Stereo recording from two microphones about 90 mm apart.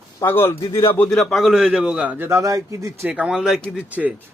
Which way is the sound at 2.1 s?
35° right (ahead or behind).